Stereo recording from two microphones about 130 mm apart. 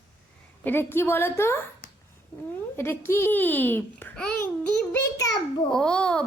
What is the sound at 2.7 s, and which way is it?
Speech, 20° left (ahead or behind).